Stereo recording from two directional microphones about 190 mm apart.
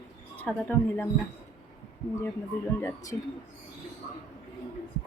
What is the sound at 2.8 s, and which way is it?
Speech, 10° left (ahead or behind).